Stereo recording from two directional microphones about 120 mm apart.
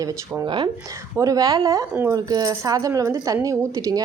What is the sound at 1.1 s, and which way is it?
A woman's voice, 30° right (ahead or behind).